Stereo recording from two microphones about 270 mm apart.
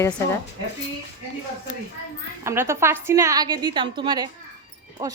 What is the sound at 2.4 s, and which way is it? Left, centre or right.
Speech, centre.